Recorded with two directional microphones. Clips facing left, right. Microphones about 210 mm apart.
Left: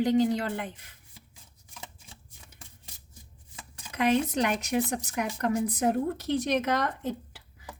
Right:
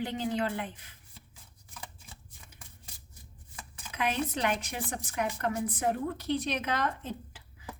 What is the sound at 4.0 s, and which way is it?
A woman's voice, 45° left (ahead or behind).